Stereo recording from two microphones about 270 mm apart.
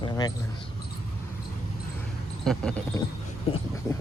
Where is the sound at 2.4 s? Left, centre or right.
Centre.